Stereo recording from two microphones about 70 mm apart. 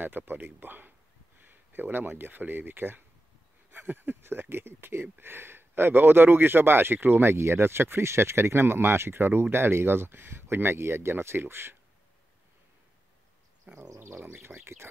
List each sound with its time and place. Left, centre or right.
0.0 s speech: right
13.9 s speech: right